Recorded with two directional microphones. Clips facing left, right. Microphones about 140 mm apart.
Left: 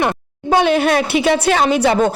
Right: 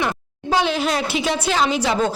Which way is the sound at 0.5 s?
55° left (ahead or behind).